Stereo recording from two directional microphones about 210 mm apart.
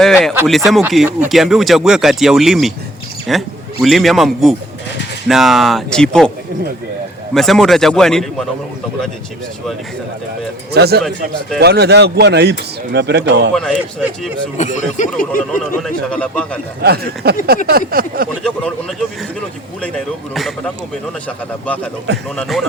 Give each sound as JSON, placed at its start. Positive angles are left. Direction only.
{"t": 0.0, "sound": "speech", "side_deg": 0}
{"t": 7.3, "sound": "speech", "side_deg": 0}
{"t": 10.7, "sound": "speech", "side_deg": -50}
{"t": 13.5, "sound": "speech", "side_deg": 0}
{"t": 14.6, "sound": "speech", "side_deg": 35}
{"t": 15.8, "sound": "speech", "side_deg": 5}
{"t": 16.8, "sound": "speech", "side_deg": -50}
{"t": 22.4, "sound": "speech", "side_deg": 0}